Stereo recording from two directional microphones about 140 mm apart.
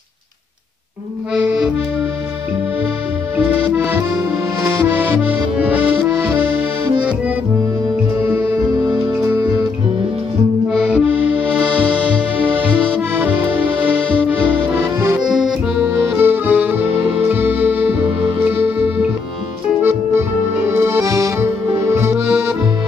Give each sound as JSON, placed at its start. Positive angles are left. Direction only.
{"t": 1.3, "sound": "accordion", "side_deg": -5}
{"t": 3.3, "sound": "accordion", "side_deg": -15}
{"t": 8.3, "sound": "music", "side_deg": -10}
{"t": 10.7, "sound": "accordion", "side_deg": -5}
{"t": 13.1, "sound": "accordion", "side_deg": -10}
{"t": 15.2, "sound": "accordion", "side_deg": -5}
{"t": 15.8, "sound": "music", "side_deg": -15}
{"t": 19.8, "sound": "accordion", "side_deg": -15}